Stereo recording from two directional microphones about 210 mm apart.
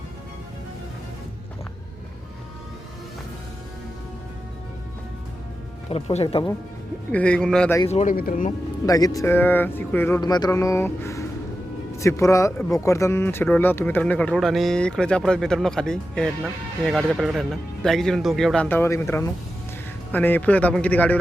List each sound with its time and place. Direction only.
5.9 s speech: 25° left (ahead or behind)
7.1 s speech: 5° left (ahead or behind)
7.9 s speech: 30° left (ahead or behind)
8.1 s speech: 40° left (ahead or behind)
8.9 s speech: 15° left (ahead or behind)